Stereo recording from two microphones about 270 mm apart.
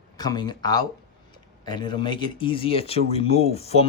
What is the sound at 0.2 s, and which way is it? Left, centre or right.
Speech, centre.